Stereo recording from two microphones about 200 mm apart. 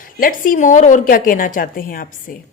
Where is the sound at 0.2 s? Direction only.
45° left (ahead or behind).